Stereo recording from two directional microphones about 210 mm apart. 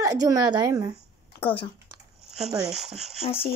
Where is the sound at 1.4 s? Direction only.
25° left (ahead or behind).